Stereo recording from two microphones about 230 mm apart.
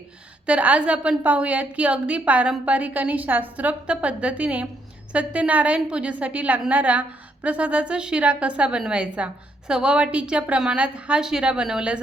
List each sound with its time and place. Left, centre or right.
0.4 s a woman's voice: centre